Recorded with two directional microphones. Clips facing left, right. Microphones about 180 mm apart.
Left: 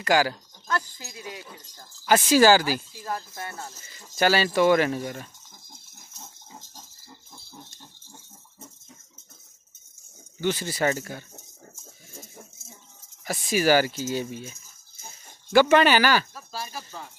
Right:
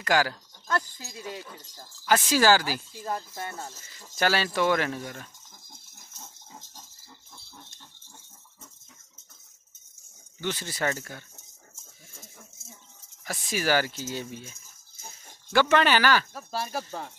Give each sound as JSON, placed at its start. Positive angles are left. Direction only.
{"t": 0.0, "sound": "speech", "side_deg": 5}
{"t": 2.3, "sound": "speech", "side_deg": 5}
{"t": 3.0, "sound": "speech", "side_deg": -20}
{"t": 3.5, "sound": "speech", "side_deg": 5}
{"t": 6.1, "sound": "rattle", "side_deg": 5}
{"t": 10.4, "sound": "speech", "side_deg": 10}
{"t": 12.1, "sound": "a sound", "side_deg": 25}
{"t": 13.2, "sound": "speech", "side_deg": 10}
{"t": 15.5, "sound": "speech", "side_deg": 5}
{"t": 16.3, "sound": "speech", "side_deg": -55}